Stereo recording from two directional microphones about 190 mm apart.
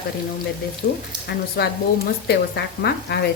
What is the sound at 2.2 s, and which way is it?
Frying, 60° left (ahead or behind).